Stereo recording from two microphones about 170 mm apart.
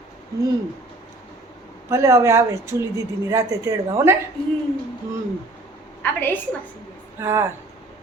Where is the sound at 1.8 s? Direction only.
15° right (ahead or behind).